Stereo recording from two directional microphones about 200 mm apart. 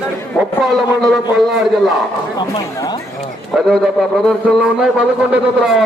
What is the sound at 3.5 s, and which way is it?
A man's voice, centre (ahead or behind).